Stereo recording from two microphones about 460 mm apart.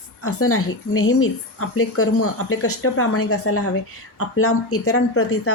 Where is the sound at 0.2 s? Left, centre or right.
Left.